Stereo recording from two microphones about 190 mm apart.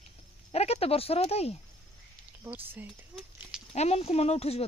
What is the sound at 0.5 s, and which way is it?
Speech, 35° left (ahead or behind).